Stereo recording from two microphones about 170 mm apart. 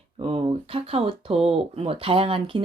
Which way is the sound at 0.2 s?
30° right (ahead or behind).